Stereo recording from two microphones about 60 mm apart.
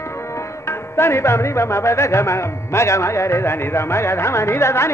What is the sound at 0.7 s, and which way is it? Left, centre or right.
Music, left.